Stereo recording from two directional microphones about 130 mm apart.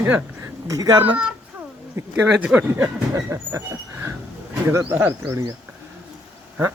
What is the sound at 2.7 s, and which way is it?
Speech, 20° right (ahead or behind).